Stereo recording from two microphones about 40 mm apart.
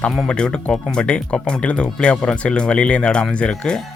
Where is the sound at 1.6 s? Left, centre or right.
Left.